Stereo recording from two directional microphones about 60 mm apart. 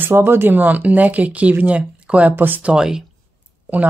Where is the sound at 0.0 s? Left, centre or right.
Right; by 2.3 s centre.